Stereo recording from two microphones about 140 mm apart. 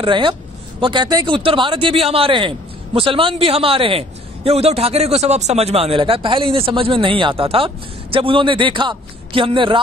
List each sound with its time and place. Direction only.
0.0 s speech: 35° right (ahead or behind)